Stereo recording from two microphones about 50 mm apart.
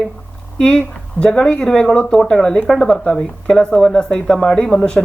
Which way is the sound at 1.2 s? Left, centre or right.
Centre.